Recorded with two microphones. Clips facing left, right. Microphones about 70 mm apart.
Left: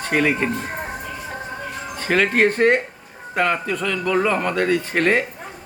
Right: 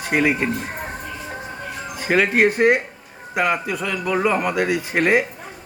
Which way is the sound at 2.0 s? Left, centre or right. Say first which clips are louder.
Right 1 dB; centre.